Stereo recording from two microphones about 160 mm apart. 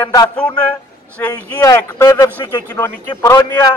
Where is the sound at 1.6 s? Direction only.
20° left (ahead or behind).